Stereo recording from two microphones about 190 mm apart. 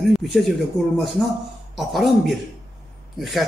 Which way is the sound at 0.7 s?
20° left (ahead or behind).